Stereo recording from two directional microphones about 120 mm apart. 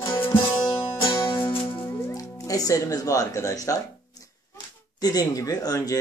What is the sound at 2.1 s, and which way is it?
Speech, 30° left (ahead or behind).